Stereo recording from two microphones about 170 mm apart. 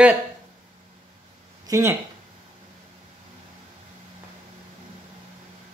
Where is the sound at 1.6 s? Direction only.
20° right (ahead or behind).